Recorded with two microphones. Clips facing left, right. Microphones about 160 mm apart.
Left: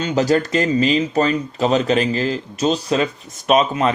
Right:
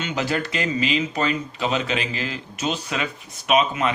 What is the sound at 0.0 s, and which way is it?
Speech, 40° left (ahead or behind).